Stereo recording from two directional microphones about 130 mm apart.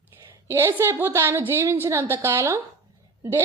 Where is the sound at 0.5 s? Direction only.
20° right (ahead or behind).